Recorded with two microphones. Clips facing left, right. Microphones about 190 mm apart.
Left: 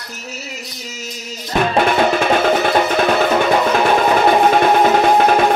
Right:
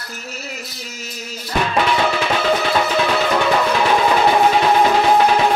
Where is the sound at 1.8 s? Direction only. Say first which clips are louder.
Left 4 dB; 50° left (ahead or behind).